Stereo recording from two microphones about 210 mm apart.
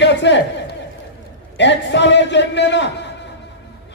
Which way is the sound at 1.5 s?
55° left (ahead or behind).